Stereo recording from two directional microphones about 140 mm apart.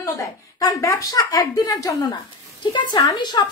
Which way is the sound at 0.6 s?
25° left (ahead or behind).